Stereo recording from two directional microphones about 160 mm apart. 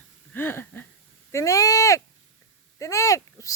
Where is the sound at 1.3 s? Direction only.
20° left (ahead or behind).